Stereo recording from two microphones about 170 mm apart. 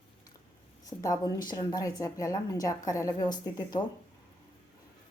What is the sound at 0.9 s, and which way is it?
A woman's voice, 20° left (ahead or behind).